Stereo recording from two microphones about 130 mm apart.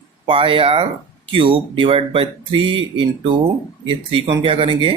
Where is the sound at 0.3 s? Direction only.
40° right (ahead or behind).